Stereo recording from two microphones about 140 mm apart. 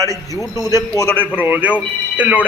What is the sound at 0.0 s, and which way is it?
Speech, 20° right (ahead or behind).